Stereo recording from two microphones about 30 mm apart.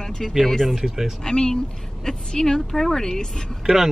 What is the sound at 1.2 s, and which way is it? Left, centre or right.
A woman's voice, left.